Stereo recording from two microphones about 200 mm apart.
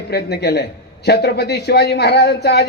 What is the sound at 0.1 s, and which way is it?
Speech, 55° left (ahead or behind).